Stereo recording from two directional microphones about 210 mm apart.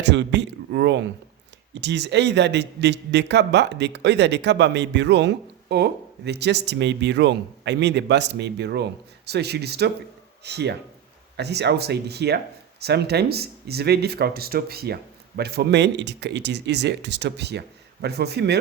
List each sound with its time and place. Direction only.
0.0 s a man's voice: 55° right (ahead or behind)